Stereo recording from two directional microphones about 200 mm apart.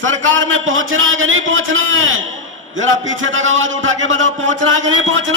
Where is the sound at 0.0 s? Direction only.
75° right (ahead or behind).